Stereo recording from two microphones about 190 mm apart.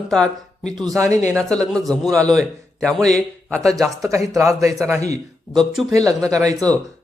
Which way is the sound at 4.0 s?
15° right (ahead or behind).